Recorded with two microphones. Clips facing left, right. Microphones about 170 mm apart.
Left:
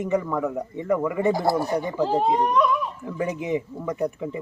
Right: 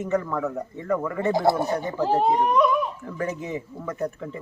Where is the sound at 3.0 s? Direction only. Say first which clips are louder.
Left 2 dB; 15° left (ahead or behind).